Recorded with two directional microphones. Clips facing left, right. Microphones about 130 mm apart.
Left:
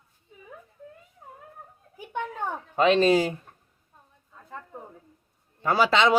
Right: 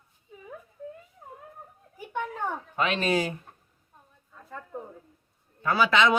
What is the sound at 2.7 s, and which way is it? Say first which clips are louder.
Speech: left 7 dB; 30° left (ahead or behind).